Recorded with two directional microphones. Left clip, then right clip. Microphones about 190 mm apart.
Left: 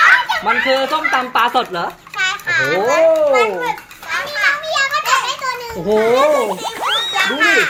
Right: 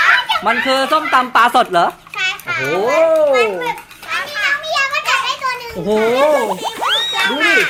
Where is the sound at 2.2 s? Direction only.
Centre (ahead or behind).